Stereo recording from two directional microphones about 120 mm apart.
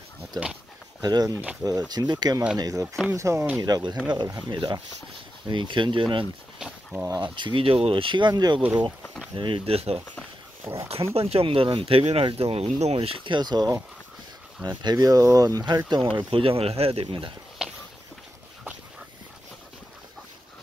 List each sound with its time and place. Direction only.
1.0 s speech: 30° right (ahead or behind)
6.6 s speech: 5° right (ahead or behind)
7.2 s speech: 40° right (ahead or behind)
8.5 s speech: 10° right (ahead or behind)
9.3 s speech: 45° right (ahead or behind)
10.6 s speech: 25° right (ahead or behind)
11.1 s speech: 55° right (ahead or behind); by 15.8 s 35° right (ahead or behind)
15.9 s speech: 45° right (ahead or behind)
17.6 s a sound: 5° right (ahead or behind)